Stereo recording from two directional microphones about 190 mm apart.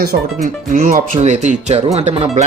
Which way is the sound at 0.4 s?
50° right (ahead or behind).